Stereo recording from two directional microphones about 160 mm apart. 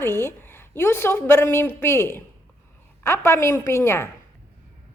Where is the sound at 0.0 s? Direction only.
15° left (ahead or behind).